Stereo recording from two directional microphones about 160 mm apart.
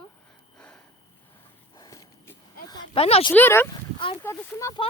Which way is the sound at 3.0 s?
40° left (ahead or behind).